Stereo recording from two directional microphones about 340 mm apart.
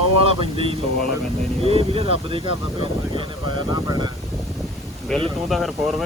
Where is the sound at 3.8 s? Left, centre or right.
Centre.